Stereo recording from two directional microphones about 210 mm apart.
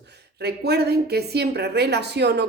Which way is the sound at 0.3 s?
50° right (ahead or behind).